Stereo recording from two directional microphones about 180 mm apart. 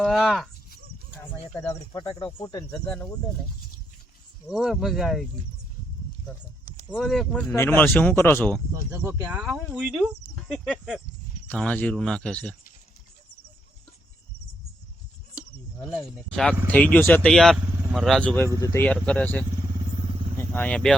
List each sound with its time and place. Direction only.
0.0 s speech: centre (ahead or behind)
1.2 s speech: 15° left (ahead or behind)
2.8 s speech: 5° left (ahead or behind)
4.4 s speech: centre (ahead or behind)
6.9 s speech: centre (ahead or behind)
7.5 s speech: 10° left (ahead or behind)
9.0 s speech: 10° right (ahead or behind)
16.1 s speech: 5° left (ahead or behind)
18.5 s speech: 20° left (ahead or behind)
18.9 s speech: 5° left (ahead or behind)